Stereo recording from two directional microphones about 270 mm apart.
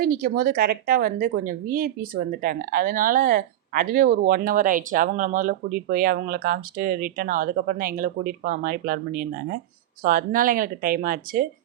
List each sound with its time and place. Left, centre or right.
0.0 s a woman's voice: right